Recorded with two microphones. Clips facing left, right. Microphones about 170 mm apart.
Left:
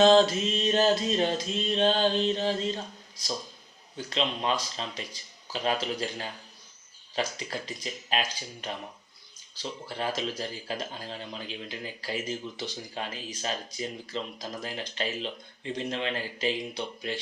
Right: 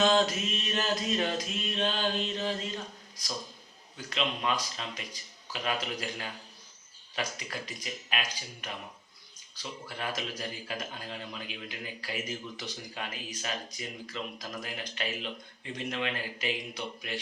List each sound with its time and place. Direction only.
0.0 s a man's voice: 30° left (ahead or behind)